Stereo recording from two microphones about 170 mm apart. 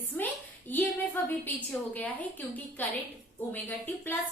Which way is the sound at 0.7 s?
10° left (ahead or behind).